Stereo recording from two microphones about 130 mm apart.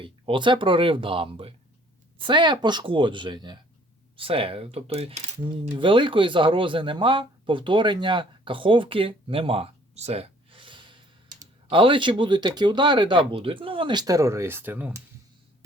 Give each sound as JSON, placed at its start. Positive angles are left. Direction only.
{"t": 0.0, "sound": "speech", "side_deg": -40}
{"t": 5.7, "sound": "a man's voice", "side_deg": -40}